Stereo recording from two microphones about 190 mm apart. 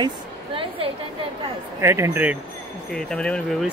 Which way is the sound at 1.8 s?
15° right (ahead or behind).